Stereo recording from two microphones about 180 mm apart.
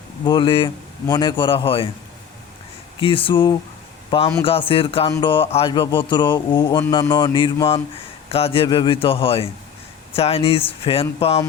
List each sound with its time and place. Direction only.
0.3 s speech: 25° left (ahead or behind)
3.0 s a man's voice: 30° left (ahead or behind)